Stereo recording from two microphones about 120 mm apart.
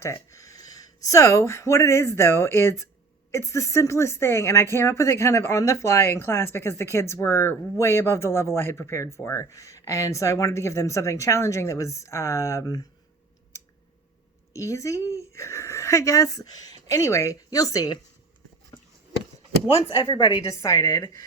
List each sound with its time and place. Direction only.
0.0 s speech: 25° left (ahead or behind)
14.5 s speech: 25° left (ahead or behind)
19.7 s speech: 20° left (ahead or behind)
20.1 s a woman's voice: 35° left (ahead or behind)
20.6 s speech: 25° left (ahead or behind)